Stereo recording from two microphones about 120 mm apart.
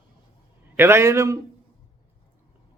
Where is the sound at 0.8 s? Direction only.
20° right (ahead or behind).